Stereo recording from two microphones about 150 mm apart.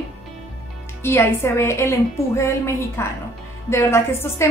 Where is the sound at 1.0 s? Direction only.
15° left (ahead or behind).